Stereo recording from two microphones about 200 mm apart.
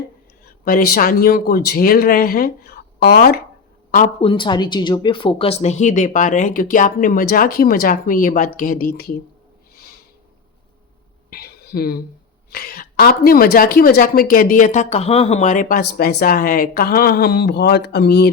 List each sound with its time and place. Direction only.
0.6 s a woman's voice: 50° left (ahead or behind)
3.9 s speech: 30° left (ahead or behind); by 9.1 s 50° left (ahead or behind)
11.3 s a sound: 50° left (ahead or behind)
12.5 s a woman's voice: 50° left (ahead or behind)